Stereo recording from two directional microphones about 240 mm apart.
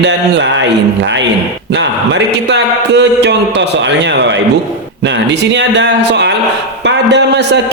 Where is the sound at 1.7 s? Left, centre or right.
Right.